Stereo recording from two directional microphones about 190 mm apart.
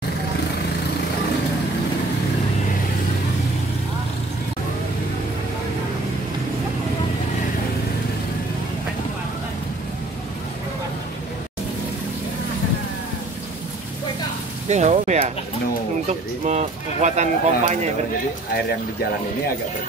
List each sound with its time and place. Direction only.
14.7 s speech: 40° right (ahead or behind)